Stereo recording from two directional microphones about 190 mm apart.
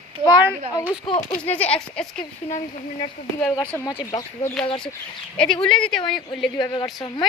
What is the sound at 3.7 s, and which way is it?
Speech, 10° left (ahead or behind).